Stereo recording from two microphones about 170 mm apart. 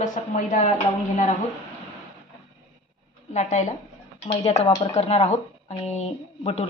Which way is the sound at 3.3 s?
45° left (ahead or behind).